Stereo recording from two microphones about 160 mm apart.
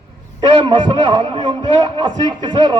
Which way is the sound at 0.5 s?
30° right (ahead or behind).